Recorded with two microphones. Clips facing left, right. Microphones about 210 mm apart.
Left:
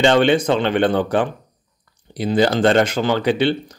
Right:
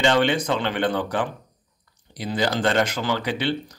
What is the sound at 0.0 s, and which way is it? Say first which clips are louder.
Speech: left 6 dB; 30° left (ahead or behind).